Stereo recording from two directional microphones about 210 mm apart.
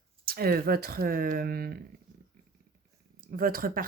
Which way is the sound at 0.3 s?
45° right (ahead or behind).